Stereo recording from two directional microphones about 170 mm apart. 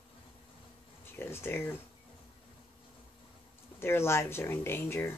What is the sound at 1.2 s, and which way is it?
Speech, 15° left (ahead or behind).